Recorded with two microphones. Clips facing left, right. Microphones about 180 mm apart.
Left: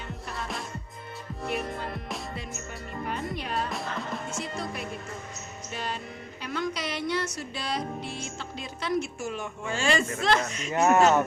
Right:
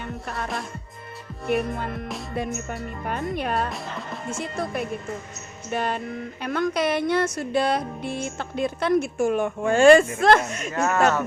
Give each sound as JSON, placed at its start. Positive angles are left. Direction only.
{"t": 0.0, "sound": "music", "side_deg": -55}
{"t": 1.5, "sound": "speech", "side_deg": -55}
{"t": 3.1, "sound": "speech", "side_deg": -55}
{"t": 3.7, "sound": "speech", "side_deg": 0}
{"t": 4.3, "sound": "speech", "side_deg": -55}
{"t": 10.7, "sound": "speech", "side_deg": 20}